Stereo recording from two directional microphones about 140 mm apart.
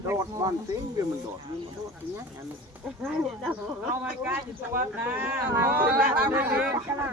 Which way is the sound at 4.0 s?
15° right (ahead or behind).